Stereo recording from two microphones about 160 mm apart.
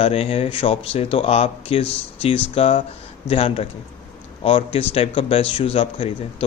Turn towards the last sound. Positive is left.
turn(degrees=35)  # may be behind; listen again after turning